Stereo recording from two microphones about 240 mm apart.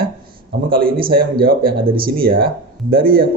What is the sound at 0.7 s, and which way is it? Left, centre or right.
A man's voice, right.